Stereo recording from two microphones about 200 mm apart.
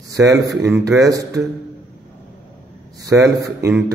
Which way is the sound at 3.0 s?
15° right (ahead or behind).